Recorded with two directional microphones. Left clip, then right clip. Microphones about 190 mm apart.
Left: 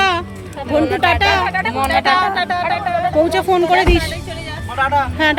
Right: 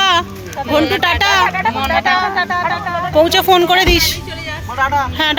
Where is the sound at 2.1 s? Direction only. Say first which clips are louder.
Right 1 dB; 30° left (ahead or behind).